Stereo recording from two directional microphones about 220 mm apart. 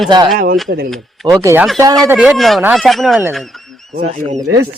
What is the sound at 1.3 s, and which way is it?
Speech, 15° right (ahead or behind).